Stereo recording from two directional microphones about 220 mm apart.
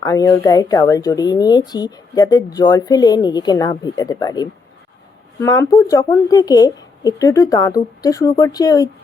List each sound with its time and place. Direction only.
0.0 s speech: 15° left (ahead or behind)